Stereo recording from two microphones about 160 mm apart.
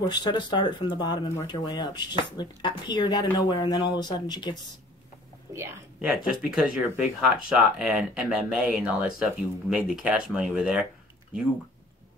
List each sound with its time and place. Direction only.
0.0 s speech: 25° left (ahead or behind)
5.5 s a woman's voice: 15° right (ahead or behind)
6.0 s speech: 5° right (ahead or behind)